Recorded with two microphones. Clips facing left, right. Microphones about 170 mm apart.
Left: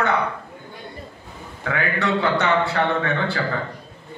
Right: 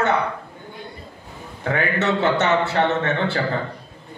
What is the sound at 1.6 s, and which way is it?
A man's voice, 25° right (ahead or behind).